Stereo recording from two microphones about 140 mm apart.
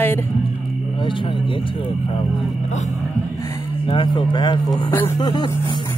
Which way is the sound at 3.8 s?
35° left (ahead or behind).